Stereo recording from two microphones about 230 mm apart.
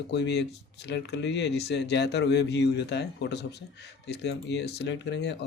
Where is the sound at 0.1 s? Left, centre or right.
Left.